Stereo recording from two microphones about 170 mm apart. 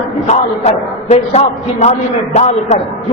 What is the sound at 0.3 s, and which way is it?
A man's voice, 40° left (ahead or behind).